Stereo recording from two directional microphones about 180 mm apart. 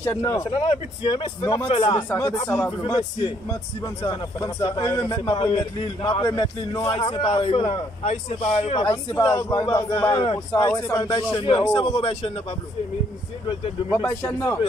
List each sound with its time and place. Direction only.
0.0 s a man's voice: 15° left (ahead or behind)
0.5 s a man's voice: 30° left (ahead or behind)
2.0 s a man's voice: 15° left (ahead or behind)
2.8 s a man's voice: 30° left (ahead or behind)
9.1 s a man's voice: 15° left (ahead or behind)
13.5 s a man's voice: 25° left (ahead or behind)
14.0 s a man's voice: 15° left (ahead or behind)